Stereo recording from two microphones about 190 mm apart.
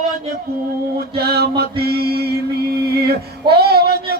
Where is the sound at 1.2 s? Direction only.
55° right (ahead or behind).